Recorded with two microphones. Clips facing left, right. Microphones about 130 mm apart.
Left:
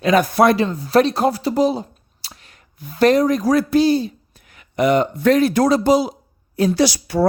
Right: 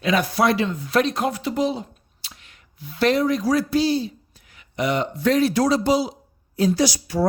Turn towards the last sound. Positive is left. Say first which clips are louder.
# left 4 dB
turn(degrees=65)  # may be behind; listen again after turning